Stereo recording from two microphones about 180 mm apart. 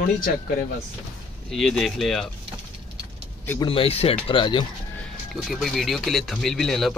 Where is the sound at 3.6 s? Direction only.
30° left (ahead or behind).